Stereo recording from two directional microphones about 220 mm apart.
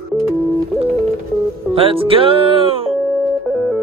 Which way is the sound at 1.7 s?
25° right (ahead or behind).